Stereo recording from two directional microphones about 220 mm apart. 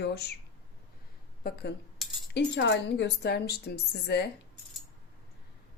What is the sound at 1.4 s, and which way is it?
Speech, 45° left (ahead or behind).